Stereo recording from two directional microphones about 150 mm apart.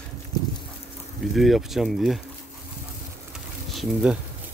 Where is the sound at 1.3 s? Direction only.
Centre (ahead or behind).